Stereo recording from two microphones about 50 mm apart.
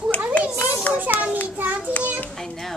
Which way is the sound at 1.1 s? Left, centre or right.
Right.